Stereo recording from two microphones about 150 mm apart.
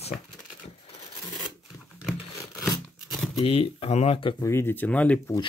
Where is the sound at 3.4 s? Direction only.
40° left (ahead or behind).